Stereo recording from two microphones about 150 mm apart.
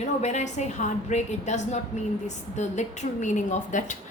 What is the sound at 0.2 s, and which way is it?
A woman's voice, 50° left (ahead or behind).